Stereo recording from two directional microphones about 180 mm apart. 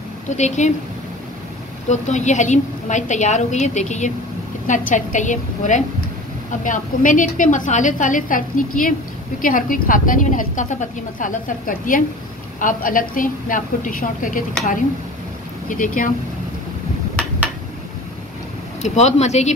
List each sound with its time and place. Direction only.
0.4 s a woman's voice: 40° left (ahead or behind)
1.9 s a woman's voice: 40° left (ahead or behind)
15.7 s a woman's voice: 50° left (ahead or behind)
18.8 s a woman's voice: 40° left (ahead or behind)